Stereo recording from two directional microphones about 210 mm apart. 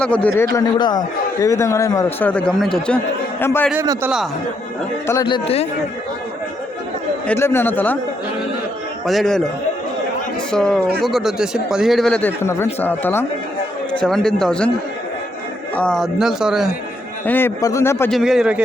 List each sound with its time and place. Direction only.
0.0 s a man's voice: 5° left (ahead or behind)
0.5 s a man's voice: 20° left (ahead or behind)
5.0 s speech: 20° left (ahead or behind)
7.3 s a man's voice: 10° left (ahead or behind)
9.0 s a man's voice: centre (ahead or behind)
10.5 s a man's voice: 5° left (ahead or behind)
15.7 s a man's voice: 5° left (ahead or behind)
17.2 s a man's voice: 10° left (ahead or behind)
18.1 s a man's voice: centre (ahead or behind)